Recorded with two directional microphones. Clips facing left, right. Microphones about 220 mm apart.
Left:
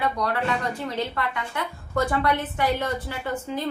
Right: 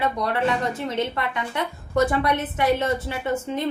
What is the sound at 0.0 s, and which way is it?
A woman's voice, 25° right (ahead or behind).